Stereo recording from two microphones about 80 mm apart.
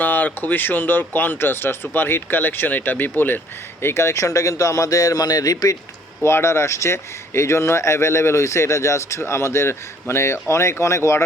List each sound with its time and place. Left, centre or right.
0.0 s speech: left
6.2 s speech: left